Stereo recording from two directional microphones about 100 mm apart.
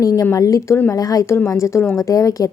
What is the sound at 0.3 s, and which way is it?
A woman's voice, 35° left (ahead or behind).